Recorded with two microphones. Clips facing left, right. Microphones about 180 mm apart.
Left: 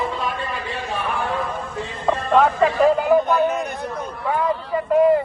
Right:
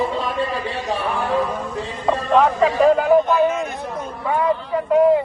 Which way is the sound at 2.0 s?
Centre (ahead or behind).